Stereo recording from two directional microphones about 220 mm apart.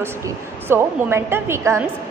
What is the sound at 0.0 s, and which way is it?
A woman's voice, 10° right (ahead or behind).